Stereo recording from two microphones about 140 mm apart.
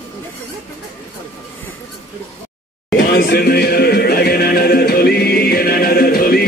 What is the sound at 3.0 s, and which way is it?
Music, 90° left.